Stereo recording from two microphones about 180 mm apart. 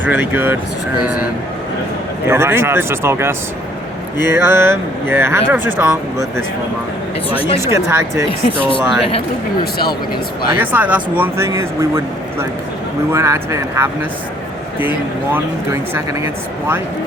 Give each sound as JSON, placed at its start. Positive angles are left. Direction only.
{"t": 0.0, "sound": "speech", "side_deg": -10}
{"t": 2.2, "sound": "speech", "side_deg": -15}
{"t": 8.7, "sound": "speech", "side_deg": 30}
{"t": 10.6, "sound": "speech", "side_deg": -10}